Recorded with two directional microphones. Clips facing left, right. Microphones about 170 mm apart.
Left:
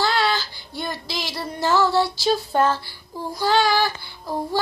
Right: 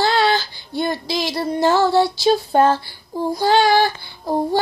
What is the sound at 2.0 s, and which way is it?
Child singing, 20° right (ahead or behind).